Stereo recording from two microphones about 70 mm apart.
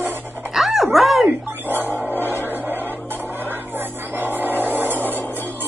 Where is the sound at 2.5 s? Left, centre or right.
Right.